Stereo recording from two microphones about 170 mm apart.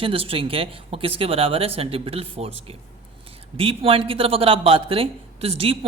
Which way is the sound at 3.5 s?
35° right (ahead or behind).